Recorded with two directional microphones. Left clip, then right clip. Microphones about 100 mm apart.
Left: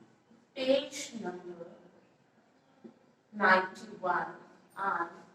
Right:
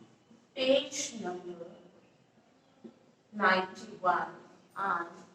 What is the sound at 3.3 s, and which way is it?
A woman's voice, 25° right (ahead or behind).